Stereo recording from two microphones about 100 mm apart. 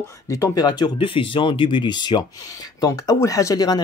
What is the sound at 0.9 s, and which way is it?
Speech, 65° left (ahead or behind).